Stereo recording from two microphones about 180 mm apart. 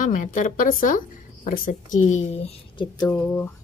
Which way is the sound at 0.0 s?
45° left (ahead or behind).